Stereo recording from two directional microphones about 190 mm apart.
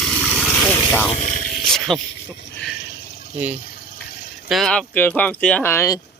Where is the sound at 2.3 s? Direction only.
65° left (ahead or behind).